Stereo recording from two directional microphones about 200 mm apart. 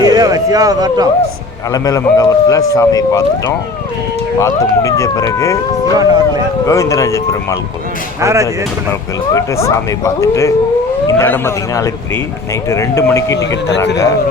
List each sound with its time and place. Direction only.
0.0 s speech: 20° right (ahead or behind)
1.7 s speech: 20° left (ahead or behind)
4.4 s speech: 15° left (ahead or behind)
6.0 s speech: 20° right (ahead or behind)
6.7 s speech: 15° left (ahead or behind)
8.2 s speech: 15° right (ahead or behind)
9.3 s speech: 15° left (ahead or behind)